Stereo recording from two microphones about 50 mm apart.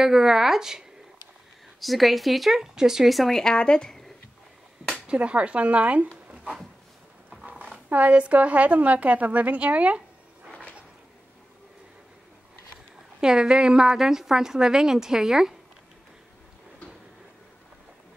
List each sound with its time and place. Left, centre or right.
0.0 s a woman's voice: centre
3.2 s speech: centre
3.5 s speech: centre
4.9 s a woman's voice: right
7.9 s a woman's voice: right
13.2 s a woman's voice: centre